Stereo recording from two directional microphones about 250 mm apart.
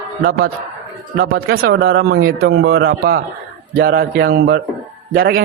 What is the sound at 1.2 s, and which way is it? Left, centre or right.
A man's voice, right.